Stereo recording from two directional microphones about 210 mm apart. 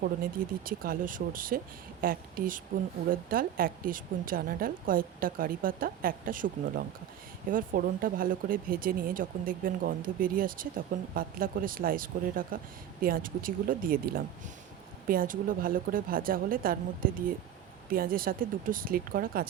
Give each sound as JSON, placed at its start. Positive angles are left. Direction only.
{"t": 0.0, "sound": "a woman's voice", "side_deg": -45}